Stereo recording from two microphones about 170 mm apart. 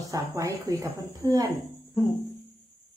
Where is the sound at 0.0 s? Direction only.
20° right (ahead or behind).